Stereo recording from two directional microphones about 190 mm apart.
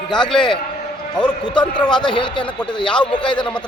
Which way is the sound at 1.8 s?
5° left (ahead or behind).